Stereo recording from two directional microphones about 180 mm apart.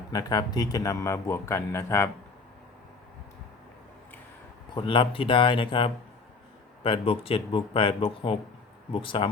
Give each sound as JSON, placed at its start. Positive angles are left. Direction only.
{"t": 0.1, "sound": "speech", "side_deg": 20}
{"t": 4.7, "sound": "speech", "side_deg": 30}